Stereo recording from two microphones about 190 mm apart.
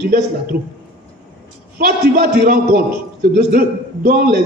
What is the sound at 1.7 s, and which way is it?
A man's voice, 60° right (ahead or behind).